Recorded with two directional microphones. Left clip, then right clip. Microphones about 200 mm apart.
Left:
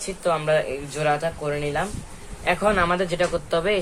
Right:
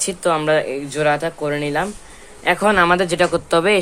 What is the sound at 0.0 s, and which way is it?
Speech, 55° right (ahead or behind).